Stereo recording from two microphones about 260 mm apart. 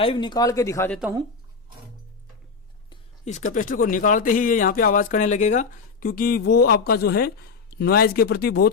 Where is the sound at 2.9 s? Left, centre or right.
Left.